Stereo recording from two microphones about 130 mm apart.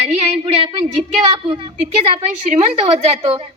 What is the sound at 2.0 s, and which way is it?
Speech, 55° right (ahead or behind).